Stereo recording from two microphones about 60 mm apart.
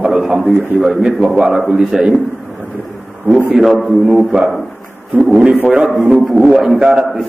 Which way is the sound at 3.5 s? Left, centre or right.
Centre.